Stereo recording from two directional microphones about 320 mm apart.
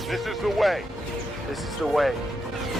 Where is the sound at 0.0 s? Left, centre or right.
Centre.